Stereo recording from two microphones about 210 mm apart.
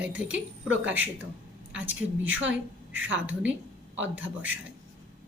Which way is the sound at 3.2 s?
5° right (ahead or behind).